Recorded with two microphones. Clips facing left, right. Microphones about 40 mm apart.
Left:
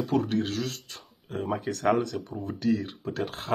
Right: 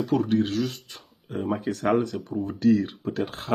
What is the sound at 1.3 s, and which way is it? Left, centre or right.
Speech, centre.